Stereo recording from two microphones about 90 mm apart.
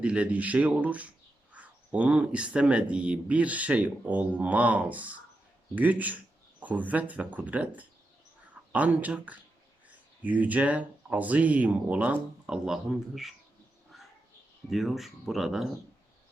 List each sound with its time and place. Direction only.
0.0 s speech: 15° right (ahead or behind)
14.7 s speech: centre (ahead or behind)